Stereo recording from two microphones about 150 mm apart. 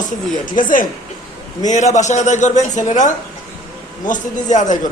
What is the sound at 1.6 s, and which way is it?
A man's voice, 55° left (ahead or behind).